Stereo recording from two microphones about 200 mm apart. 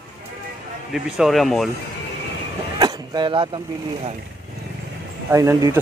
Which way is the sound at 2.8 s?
20° right (ahead or behind).